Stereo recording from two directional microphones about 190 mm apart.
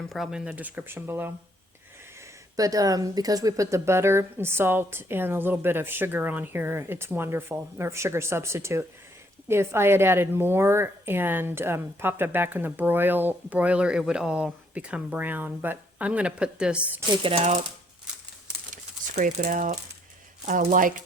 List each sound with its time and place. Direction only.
0.1 s a woman's voice: centre (ahead or behind)
2.6 s a woman's voice: 20° right (ahead or behind)
17.2 s speech: 30° right (ahead or behind)
19.1 s speech: 40° right (ahead or behind)